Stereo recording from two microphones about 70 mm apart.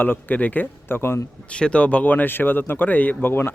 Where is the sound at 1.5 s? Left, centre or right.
Centre.